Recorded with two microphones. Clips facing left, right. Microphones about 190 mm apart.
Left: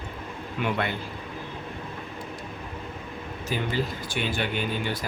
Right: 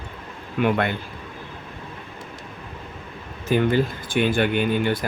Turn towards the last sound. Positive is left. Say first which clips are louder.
# right 8 dB
turn(degrees=-55)  # may be behind; listen again after turning